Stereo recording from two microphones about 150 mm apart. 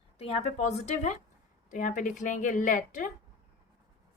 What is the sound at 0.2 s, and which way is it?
A woman's voice, 40° left (ahead or behind).